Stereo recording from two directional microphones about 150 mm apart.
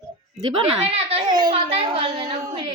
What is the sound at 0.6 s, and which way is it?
Speech, 40° right (ahead or behind).